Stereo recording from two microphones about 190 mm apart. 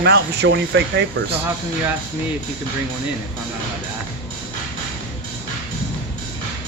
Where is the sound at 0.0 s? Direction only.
65° right (ahead or behind).